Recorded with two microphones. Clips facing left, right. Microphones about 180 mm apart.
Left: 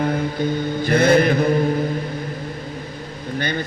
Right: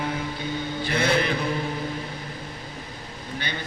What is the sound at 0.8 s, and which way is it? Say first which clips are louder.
Speech: left 9 dB; 45° left (ahead or behind).